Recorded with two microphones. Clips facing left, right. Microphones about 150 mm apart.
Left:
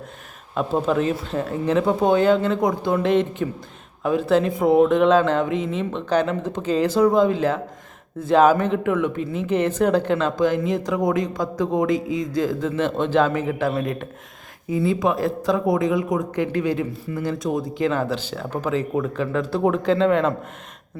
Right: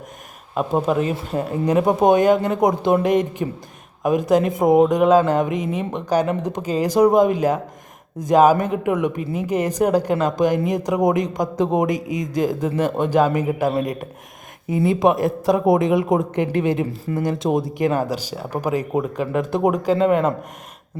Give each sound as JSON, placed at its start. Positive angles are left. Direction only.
{"t": 0.5, "sound": "speech", "side_deg": -10}
{"t": 14.8, "sound": "a woman's voice", "side_deg": -20}